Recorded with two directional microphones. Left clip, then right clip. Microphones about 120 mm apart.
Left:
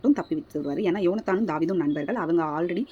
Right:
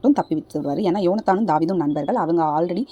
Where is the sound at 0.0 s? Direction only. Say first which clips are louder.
Right 5 dB; 45° right (ahead or behind).